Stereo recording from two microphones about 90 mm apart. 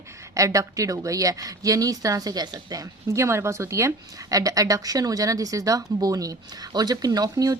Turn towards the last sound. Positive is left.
turn(degrees=-45)  # may be behind; listen again after turning